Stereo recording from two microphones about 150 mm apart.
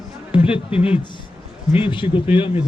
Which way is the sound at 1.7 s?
35° left (ahead or behind).